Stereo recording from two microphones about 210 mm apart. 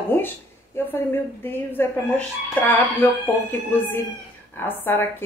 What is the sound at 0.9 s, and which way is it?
A woman's voice, 10° left (ahead or behind).